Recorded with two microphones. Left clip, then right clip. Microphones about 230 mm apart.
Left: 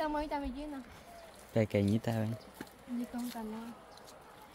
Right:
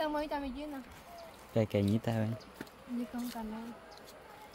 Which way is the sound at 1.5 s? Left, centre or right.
Centre.